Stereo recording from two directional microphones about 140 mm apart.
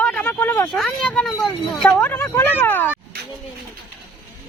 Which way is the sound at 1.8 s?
15° left (ahead or behind).